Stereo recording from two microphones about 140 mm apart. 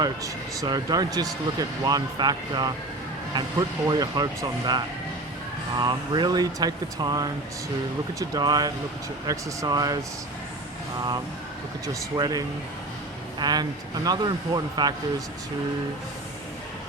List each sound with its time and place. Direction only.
0.0 s speech: 25° right (ahead or behind)
12.1 s speech: 25° right (ahead or behind)